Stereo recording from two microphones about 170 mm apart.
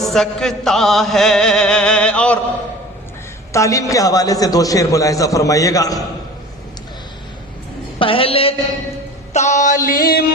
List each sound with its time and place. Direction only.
0.0 s chant: centre (ahead or behind)
3.5 s a man's voice: 20° left (ahead or behind)
7.9 s a woman's voice: 30° left (ahead or behind)
9.3 s music: 45° left (ahead or behind); by 10.2 s 60° left (ahead or behind)